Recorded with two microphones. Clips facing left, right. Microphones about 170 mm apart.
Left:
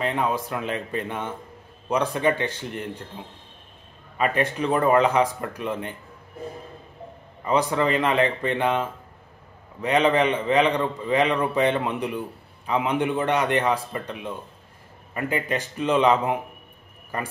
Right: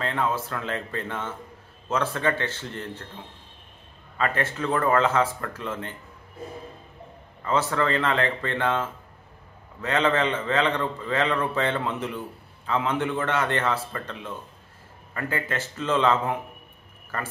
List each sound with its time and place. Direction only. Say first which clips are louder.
0.0 s a man's voice: left 2 dB; 15° left (ahead or behind)
4.2 s a man's voice: left 3 dB; 15° left (ahead or behind)
7.4 s a man's voice: left 2 dB; 15° left (ahead or behind)